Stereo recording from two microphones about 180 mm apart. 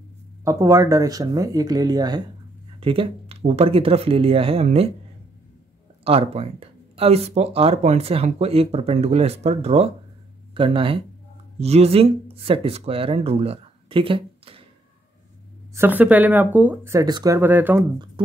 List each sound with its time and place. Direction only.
0.4 s speech: 15° right (ahead or behind); by 4.9 s 35° right (ahead or behind)
6.0 s speech: 35° right (ahead or behind)
15.7 s speech: 10° right (ahead or behind)